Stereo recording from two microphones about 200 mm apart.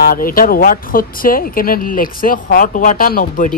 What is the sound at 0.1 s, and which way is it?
Speech, 45° left (ahead or behind).